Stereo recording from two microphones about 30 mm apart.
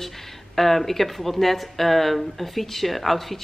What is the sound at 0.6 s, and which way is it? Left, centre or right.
Speech, centre.